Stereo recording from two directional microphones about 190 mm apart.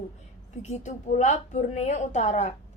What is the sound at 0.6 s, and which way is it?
A woman's voice, 40° left (ahead or behind).